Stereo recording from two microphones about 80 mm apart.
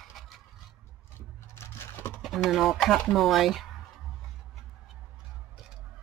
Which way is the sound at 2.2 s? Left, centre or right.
Centre.